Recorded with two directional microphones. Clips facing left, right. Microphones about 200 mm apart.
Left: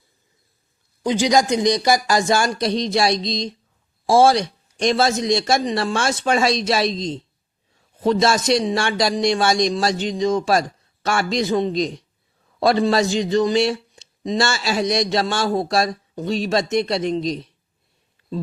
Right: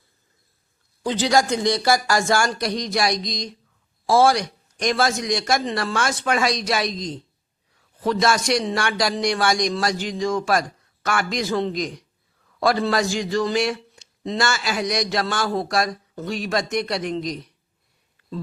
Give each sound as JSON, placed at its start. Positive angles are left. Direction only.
{"t": 1.0, "sound": "a man's voice", "side_deg": 15}